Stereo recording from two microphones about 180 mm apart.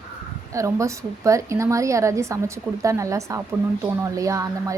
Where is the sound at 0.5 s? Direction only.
15° right (ahead or behind).